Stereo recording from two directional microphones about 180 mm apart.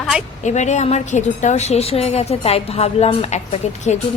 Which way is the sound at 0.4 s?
40° left (ahead or behind).